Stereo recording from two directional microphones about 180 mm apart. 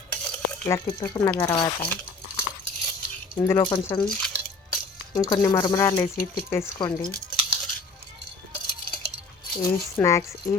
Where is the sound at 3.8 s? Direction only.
10° left (ahead or behind).